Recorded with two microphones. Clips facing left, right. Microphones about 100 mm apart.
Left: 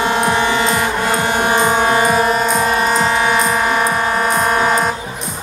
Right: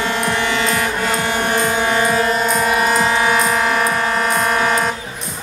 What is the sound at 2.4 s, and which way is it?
Music, 5° left (ahead or behind).